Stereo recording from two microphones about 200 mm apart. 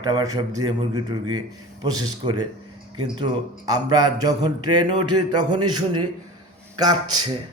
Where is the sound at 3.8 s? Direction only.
20° right (ahead or behind).